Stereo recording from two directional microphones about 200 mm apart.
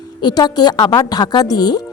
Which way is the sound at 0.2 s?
20° left (ahead or behind).